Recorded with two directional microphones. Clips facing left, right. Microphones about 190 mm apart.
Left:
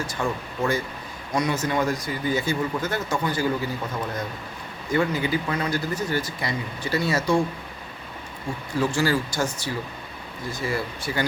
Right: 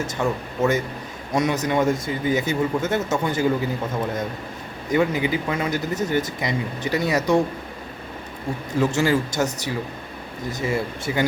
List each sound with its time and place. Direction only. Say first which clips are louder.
0.2 s speech: right 4 dB; 20° right (ahead or behind)
4.9 s speech: right 3 dB; 15° right (ahead or behind)
8.8 s speech: right 3 dB; 20° right (ahead or behind)